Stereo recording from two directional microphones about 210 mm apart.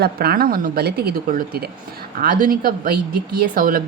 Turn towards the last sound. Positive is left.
turn(degrees=-40)  # may be behind; listen again after turning